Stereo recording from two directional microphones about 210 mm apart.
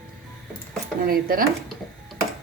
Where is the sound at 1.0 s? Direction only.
45° right (ahead or behind).